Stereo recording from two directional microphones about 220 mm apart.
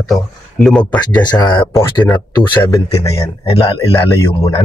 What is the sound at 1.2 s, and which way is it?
A man's voice, 20° left (ahead or behind).